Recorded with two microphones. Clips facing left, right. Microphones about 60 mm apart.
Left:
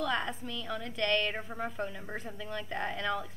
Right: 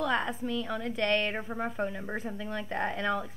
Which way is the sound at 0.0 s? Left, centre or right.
Centre.